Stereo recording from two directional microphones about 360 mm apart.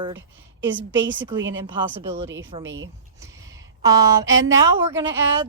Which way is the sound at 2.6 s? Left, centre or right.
Right.